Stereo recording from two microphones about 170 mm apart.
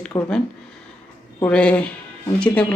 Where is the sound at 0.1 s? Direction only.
15° left (ahead or behind).